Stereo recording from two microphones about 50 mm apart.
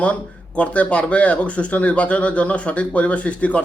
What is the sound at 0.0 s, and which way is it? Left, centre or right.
A man's voice, left.